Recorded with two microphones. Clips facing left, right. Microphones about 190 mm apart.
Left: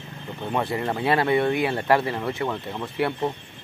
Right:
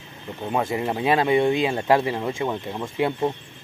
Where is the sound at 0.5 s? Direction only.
20° right (ahead or behind).